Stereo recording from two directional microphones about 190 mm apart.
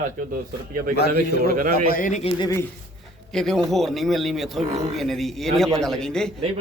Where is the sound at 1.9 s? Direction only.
45° left (ahead or behind).